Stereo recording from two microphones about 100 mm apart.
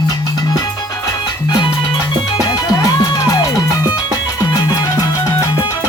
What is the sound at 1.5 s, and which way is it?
Music, 50° left (ahead or behind).